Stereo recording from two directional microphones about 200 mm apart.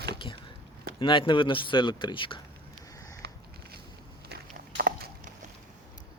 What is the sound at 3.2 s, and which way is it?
Biting, 55° right (ahead or behind).